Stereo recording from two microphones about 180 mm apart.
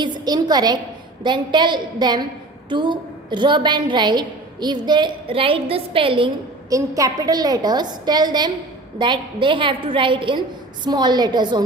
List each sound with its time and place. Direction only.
0.0 s a woman's voice: 20° right (ahead or behind)